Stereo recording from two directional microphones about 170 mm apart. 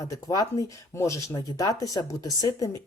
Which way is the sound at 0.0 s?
20° left (ahead or behind).